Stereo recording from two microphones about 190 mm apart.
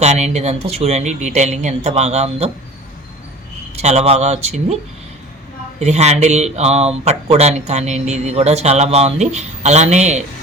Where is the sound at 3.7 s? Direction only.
35° right (ahead or behind).